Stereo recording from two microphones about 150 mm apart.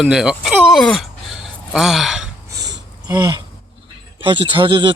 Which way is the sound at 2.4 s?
25° right (ahead or behind).